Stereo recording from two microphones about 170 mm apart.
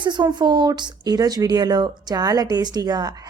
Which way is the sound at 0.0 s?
25° right (ahead or behind).